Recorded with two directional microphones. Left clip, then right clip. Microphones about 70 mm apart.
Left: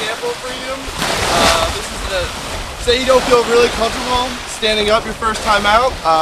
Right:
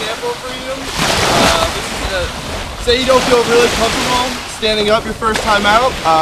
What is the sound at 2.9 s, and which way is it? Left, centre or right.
Speech, centre.